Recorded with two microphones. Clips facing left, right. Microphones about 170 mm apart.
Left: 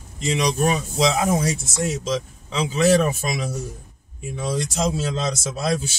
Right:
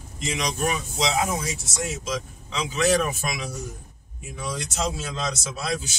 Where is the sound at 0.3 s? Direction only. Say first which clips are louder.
Left 6 dB; 35° left (ahead or behind).